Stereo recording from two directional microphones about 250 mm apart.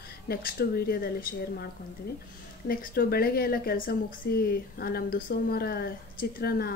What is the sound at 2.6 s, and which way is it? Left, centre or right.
Speech, left.